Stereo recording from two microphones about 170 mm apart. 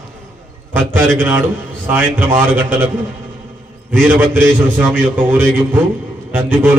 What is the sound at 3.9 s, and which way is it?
A man's voice, 10° right (ahead or behind).